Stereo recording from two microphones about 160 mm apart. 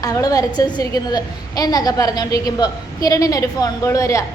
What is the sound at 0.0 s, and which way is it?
A woman's voice, 25° left (ahead or behind).